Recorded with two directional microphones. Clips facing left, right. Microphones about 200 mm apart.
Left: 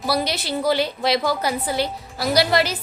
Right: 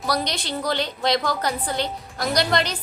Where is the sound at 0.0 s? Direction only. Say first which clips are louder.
Left 2 dB; 5° left (ahead or behind).